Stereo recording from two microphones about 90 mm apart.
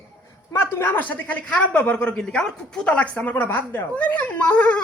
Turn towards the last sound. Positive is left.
turn(degrees=15)  # may be behind; listen again after turning